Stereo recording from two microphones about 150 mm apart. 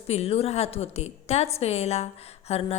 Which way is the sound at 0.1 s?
40° left (ahead or behind).